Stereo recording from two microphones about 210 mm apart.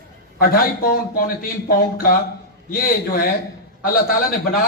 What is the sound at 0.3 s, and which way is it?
Speech, 45° left (ahead or behind).